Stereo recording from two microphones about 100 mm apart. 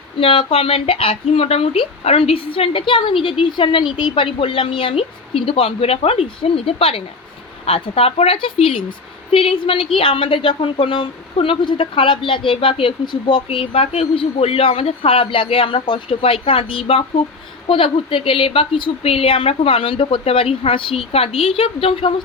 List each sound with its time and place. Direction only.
0.2 s a woman's voice: 70° left (ahead or behind)